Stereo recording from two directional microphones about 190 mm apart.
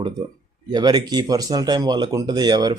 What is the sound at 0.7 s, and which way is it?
Speech, 20° right (ahead or behind).